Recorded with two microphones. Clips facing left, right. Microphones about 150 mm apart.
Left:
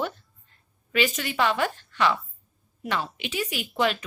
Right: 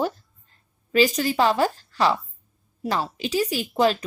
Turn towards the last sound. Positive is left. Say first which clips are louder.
# right 5 dB
turn(degrees=-35)  # may be behind; listen again after turning